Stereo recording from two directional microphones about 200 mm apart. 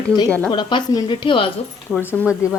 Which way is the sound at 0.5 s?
20° left (ahead or behind).